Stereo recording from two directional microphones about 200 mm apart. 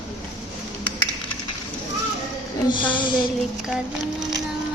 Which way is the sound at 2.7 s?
25° left (ahead or behind).